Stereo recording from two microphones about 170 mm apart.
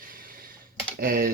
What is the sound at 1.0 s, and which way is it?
Speech, 55° right (ahead or behind).